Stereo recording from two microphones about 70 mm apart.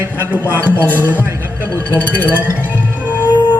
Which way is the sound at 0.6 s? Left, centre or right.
Right.